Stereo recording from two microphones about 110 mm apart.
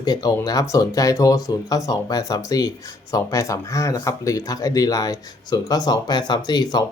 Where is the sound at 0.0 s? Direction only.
35° left (ahead or behind).